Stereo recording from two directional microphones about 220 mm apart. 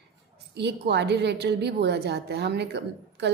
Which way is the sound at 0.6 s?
50° right (ahead or behind).